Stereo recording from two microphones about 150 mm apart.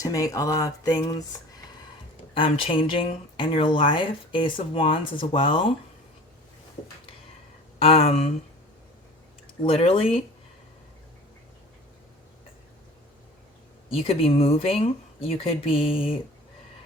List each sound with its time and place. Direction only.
0.0 s a sound: 20° left (ahead or behind)
2.3 s speech: 35° left (ahead or behind)
7.8 s speech: 40° left (ahead or behind)
9.6 s speech: 40° left (ahead or behind)
13.9 s speech: 40° left (ahead or behind)